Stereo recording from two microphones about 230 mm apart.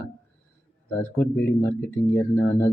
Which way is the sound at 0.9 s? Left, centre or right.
Centre.